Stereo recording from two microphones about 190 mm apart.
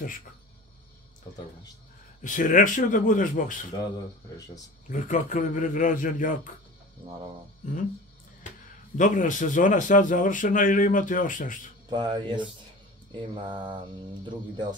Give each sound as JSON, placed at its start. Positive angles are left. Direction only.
{"t": 2.2, "sound": "speech", "side_deg": 45}
{"t": 4.8, "sound": "speech", "side_deg": 40}
{"t": 7.6, "sound": "speech", "side_deg": 40}
{"t": 11.9, "sound": "speech", "side_deg": -25}